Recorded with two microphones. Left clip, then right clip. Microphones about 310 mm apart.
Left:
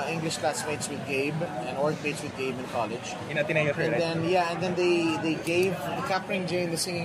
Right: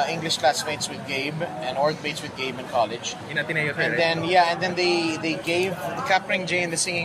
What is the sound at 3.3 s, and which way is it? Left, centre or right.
Speech, centre.